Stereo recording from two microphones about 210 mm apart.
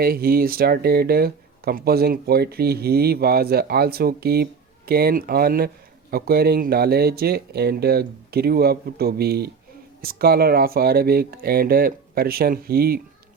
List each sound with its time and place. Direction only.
0.0 s speech: 45° right (ahead or behind)